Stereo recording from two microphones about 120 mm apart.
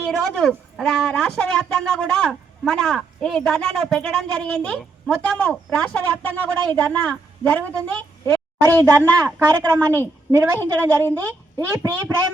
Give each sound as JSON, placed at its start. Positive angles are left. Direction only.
{"t": 0.0, "sound": "speech", "side_deg": 0}
{"t": 8.8, "sound": "a woman's voice", "side_deg": -20}